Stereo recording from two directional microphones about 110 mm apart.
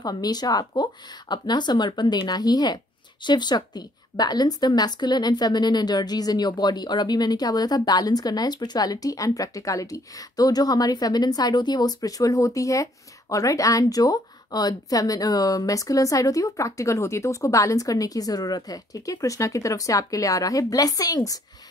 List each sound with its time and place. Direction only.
0.0 s a woman's voice: 35° left (ahead or behind)